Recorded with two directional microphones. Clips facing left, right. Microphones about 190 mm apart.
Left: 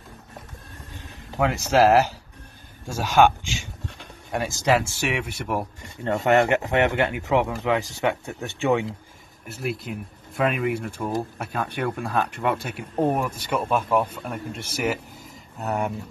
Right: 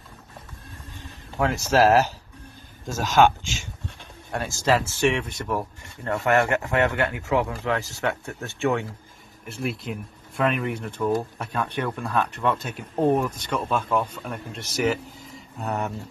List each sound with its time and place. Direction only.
0.9 s speech: 15° left (ahead or behind)
9.5 s speech: centre (ahead or behind)